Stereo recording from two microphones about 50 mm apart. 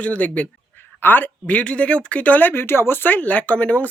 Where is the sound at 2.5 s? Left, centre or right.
Left.